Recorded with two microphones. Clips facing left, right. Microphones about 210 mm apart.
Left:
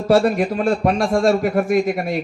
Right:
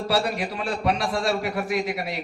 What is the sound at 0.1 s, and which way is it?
A man's voice, 50° left (ahead or behind).